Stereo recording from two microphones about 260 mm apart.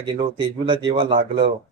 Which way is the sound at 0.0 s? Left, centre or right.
Centre.